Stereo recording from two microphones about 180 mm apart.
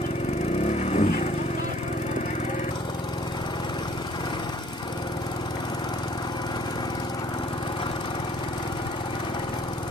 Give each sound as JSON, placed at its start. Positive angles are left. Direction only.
{"t": 0.7, "sound": "vehicle", "side_deg": 40}